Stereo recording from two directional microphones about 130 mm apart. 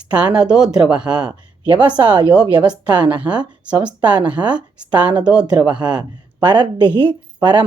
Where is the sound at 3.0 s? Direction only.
10° right (ahead or behind).